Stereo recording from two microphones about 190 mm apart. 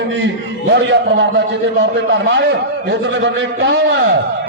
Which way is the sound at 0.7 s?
65° right (ahead or behind).